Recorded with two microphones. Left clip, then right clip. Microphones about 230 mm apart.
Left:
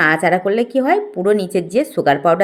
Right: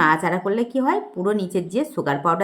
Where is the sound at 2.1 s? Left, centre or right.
Centre.